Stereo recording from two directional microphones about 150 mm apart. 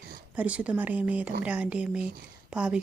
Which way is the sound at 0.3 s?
10° right (ahead or behind).